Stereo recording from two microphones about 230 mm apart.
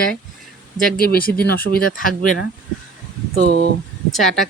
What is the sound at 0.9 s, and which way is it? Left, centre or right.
Speech, left.